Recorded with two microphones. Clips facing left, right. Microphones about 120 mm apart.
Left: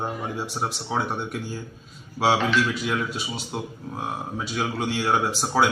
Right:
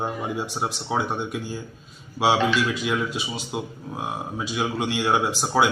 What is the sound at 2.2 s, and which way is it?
Speech, centre (ahead or behind).